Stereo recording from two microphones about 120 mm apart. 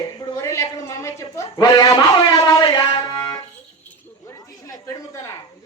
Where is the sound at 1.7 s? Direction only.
35° left (ahead or behind).